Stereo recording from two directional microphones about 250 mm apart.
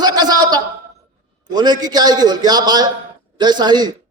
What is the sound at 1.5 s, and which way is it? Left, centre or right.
A man's voice, centre.